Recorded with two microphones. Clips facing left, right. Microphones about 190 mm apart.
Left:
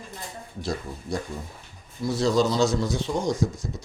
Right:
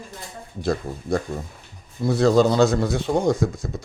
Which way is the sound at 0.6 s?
55° right (ahead or behind).